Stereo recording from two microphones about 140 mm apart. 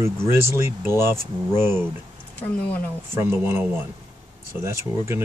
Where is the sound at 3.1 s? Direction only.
15° right (ahead or behind).